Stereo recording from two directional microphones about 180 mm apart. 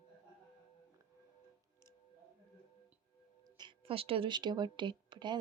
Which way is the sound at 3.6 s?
30° right (ahead or behind).